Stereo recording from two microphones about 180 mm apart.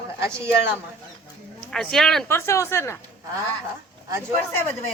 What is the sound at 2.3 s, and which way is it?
Speech, 15° left (ahead or behind).